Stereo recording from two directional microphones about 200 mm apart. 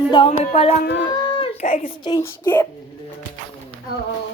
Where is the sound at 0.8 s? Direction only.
55° left (ahead or behind).